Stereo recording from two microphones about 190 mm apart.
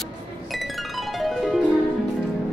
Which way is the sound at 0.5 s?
Centre (ahead or behind).